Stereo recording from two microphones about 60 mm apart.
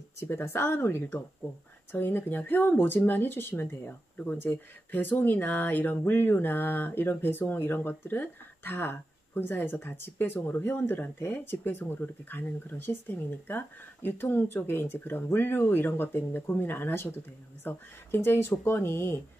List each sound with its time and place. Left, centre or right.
0.2 s speech: left